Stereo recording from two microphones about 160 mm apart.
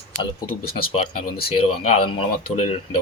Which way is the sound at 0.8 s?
35° left (ahead or behind).